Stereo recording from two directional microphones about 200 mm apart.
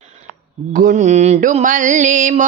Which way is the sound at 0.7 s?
40° right (ahead or behind).